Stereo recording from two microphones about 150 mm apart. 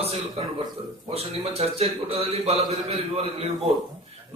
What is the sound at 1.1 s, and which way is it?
A man's voice, 40° right (ahead or behind).